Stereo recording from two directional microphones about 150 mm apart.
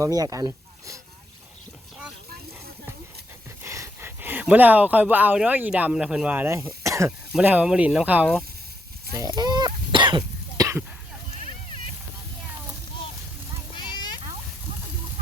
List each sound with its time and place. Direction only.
0.0 s speech: 25° right (ahead or behind)
3.6 s speech: 20° right (ahead or behind)
6.8 s throat clearing: 20° right (ahead or behind)
7.3 s speech: 10° right (ahead or behind)
9.1 s cough: 25° right (ahead or behind)
13.7 s a sound: 30° left (ahead or behind)